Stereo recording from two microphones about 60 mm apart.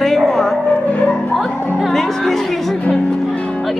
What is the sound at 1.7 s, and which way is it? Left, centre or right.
Speech, centre.